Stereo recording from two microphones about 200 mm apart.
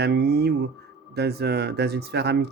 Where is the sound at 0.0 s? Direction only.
55° right (ahead or behind).